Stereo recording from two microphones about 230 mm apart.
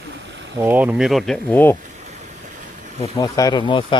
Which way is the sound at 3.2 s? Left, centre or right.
Centre.